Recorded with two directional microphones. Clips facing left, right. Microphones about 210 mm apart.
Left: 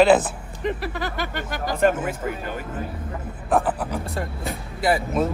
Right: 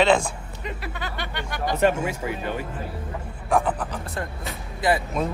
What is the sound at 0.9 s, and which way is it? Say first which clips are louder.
Speech: left 4 dB; 45° left (ahead or behind).